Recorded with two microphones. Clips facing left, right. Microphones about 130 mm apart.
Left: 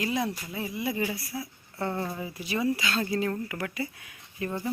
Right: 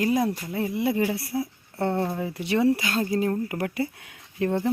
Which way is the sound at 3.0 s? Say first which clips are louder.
Right 4 dB; 35° right (ahead or behind).